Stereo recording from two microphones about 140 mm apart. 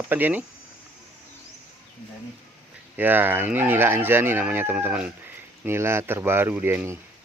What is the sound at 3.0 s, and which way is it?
Speech, 15° right (ahead or behind).